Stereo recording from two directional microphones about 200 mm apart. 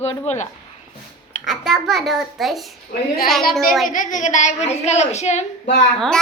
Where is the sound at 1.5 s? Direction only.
Centre (ahead or behind).